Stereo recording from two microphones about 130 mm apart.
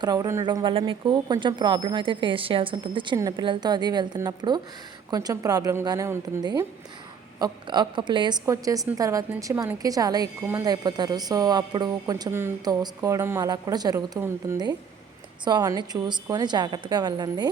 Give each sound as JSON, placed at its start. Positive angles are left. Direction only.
{"t": 0.0, "sound": "speech", "side_deg": -25}
{"t": 7.3, "sound": "speech", "side_deg": -35}
{"t": 10.4, "sound": "speech", "side_deg": -20}
{"t": 10.7, "sound": "speech", "side_deg": -30}
{"t": 12.3, "sound": "speech", "side_deg": -20}
{"t": 15.4, "sound": "speech", "side_deg": -30}